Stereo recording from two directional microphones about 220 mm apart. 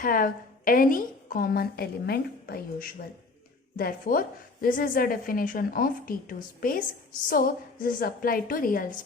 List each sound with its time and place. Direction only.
0.0 s a woman's voice: 40° left (ahead or behind)